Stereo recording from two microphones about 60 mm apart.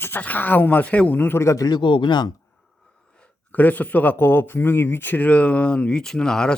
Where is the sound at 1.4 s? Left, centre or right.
Left.